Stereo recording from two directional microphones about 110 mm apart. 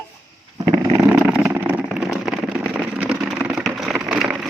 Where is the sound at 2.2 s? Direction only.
5° right (ahead or behind).